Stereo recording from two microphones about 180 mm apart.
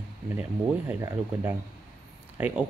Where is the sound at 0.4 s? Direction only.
10° right (ahead or behind).